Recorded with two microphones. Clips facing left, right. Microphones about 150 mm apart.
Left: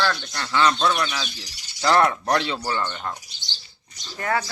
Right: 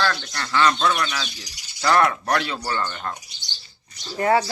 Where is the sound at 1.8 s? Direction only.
25° left (ahead or behind); by 3.1 s 10° left (ahead or behind).